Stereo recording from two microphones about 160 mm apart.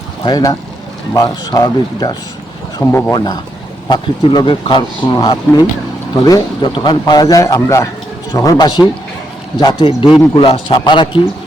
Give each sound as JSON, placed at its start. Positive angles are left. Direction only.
{"t": 0.3, "sound": "a man's voice", "side_deg": 25}
{"t": 3.8, "sound": "a man's voice", "side_deg": 25}